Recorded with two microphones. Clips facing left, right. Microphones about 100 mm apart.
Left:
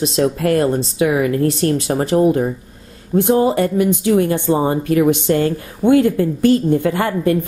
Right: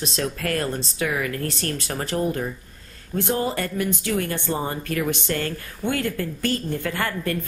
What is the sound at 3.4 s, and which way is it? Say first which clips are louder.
A woman's voice: left 10 dB; 15° left (ahead or behind).